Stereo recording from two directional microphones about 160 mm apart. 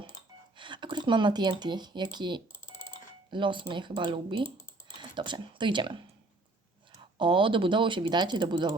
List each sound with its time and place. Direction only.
0.5 s speech: 30° right (ahead or behind)
7.2 s speech: 30° right (ahead or behind)